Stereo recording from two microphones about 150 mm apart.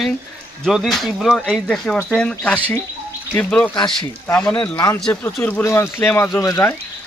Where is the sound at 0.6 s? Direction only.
Centre (ahead or behind).